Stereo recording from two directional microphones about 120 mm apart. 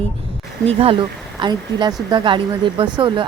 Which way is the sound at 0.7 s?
55° right (ahead or behind).